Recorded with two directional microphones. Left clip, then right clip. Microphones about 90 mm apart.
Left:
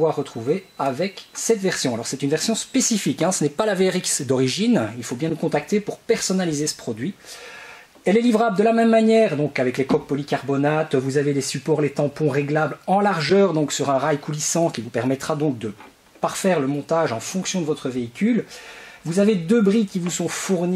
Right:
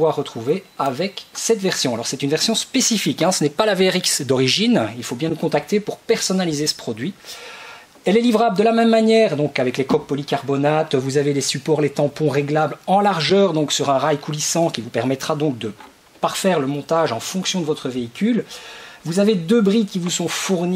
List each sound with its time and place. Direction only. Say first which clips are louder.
0.0 s speech: right 2 dB; 20° right (ahead or behind)